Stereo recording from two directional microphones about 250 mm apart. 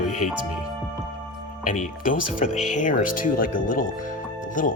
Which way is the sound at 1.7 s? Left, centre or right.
Left.